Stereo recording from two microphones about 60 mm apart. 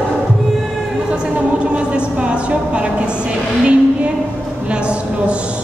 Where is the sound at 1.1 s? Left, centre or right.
Centre.